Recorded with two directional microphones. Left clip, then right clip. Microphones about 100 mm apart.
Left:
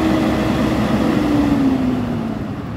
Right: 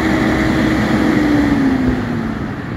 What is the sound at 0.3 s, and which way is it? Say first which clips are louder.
Vehicle: right 3 dB; 35° left (ahead or behind).